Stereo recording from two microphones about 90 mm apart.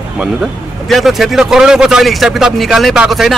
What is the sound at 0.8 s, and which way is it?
Speech, centre (ahead or behind).